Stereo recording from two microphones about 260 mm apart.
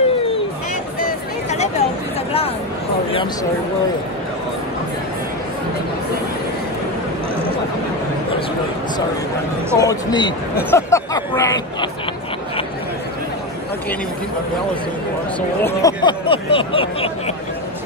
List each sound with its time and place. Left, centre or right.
1.0 s music: left
9.8 s speech: centre
15.6 s speech: centre